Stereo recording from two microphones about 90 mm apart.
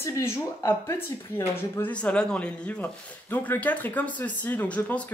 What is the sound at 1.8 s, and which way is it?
Speech, 15° left (ahead or behind).